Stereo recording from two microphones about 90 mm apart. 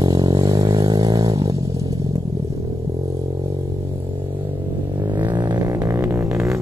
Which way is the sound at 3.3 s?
45° right (ahead or behind).